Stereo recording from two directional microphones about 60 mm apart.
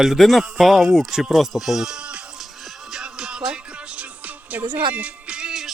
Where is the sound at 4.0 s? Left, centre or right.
Right.